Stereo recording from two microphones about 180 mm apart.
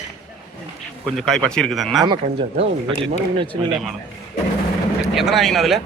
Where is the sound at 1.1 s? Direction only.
Centre (ahead or behind).